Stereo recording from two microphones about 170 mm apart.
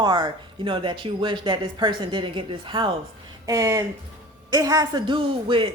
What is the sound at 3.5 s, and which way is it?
Speech, 20° right (ahead or behind).